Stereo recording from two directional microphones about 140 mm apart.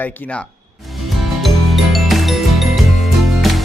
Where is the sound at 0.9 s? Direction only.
Centre (ahead or behind).